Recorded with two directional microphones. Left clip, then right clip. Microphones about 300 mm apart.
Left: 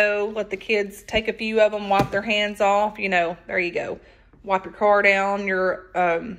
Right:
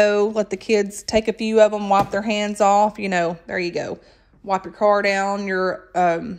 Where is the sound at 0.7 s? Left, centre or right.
Centre.